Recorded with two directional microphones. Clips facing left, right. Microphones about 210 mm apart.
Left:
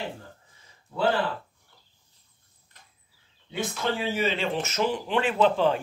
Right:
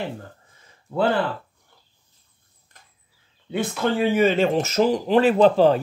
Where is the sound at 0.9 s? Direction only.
50° right (ahead or behind).